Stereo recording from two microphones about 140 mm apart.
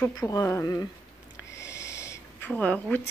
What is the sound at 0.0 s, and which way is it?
Speech, 20° left (ahead or behind).